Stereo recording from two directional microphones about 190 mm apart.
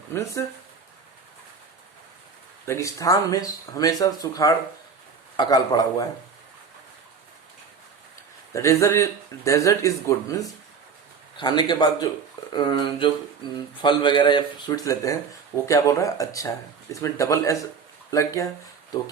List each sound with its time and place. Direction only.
0.1 s speech: 15° left (ahead or behind)
2.6 s speech: 15° left (ahead or behind)
8.5 s speech: 15° left (ahead or behind)